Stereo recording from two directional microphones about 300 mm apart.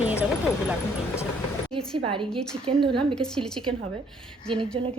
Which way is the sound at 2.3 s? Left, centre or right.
Centre.